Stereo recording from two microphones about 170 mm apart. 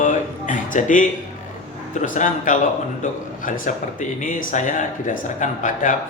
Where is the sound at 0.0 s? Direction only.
50° left (ahead or behind).